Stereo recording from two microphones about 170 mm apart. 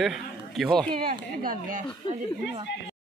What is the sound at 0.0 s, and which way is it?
Speech, centre (ahead or behind).